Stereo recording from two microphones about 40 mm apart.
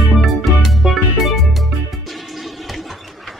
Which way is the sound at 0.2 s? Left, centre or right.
Centre.